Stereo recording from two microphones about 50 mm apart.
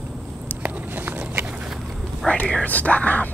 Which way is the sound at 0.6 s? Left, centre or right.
Right.